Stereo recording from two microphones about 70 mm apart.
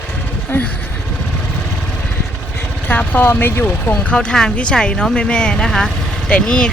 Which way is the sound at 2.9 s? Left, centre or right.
Left.